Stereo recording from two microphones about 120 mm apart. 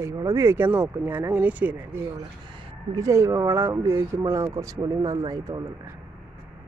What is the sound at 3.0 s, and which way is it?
Speech, 25° right (ahead or behind).